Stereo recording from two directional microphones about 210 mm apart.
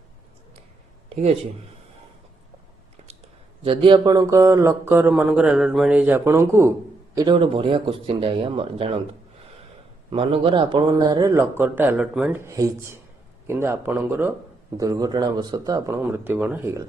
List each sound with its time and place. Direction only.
1.1 s speech: 30° right (ahead or behind)
3.6 s speech: 25° right (ahead or behind)
7.2 s speech: 25° right (ahead or behind)
10.1 s speech: 25° right (ahead or behind)